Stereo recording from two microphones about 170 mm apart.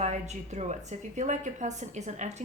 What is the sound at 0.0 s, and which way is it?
A woman's voice, 40° right (ahead or behind).